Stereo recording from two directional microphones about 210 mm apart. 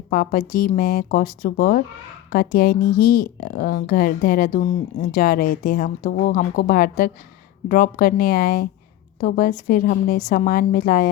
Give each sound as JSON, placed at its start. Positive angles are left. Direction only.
{"t": 0.1, "sound": "a woman's voice", "side_deg": 40}